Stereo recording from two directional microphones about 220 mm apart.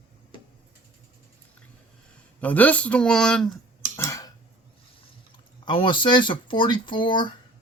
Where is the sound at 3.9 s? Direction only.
15° left (ahead or behind).